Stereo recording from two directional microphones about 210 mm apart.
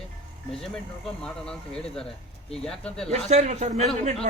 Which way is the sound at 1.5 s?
5° left (ahead or behind).